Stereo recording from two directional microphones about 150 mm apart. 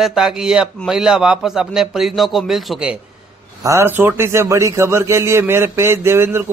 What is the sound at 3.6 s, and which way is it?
A man's voice, 15° right (ahead or behind).